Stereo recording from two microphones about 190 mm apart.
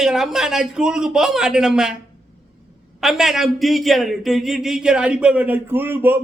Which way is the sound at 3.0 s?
Centre (ahead or behind).